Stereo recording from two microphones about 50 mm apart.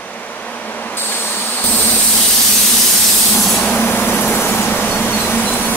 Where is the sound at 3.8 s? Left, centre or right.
Left.